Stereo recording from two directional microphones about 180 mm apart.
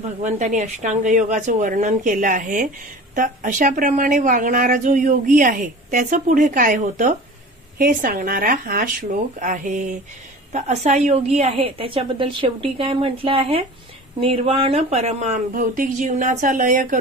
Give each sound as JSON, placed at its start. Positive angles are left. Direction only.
{"t": 0.2, "sound": "a woman's voice", "side_deg": -45}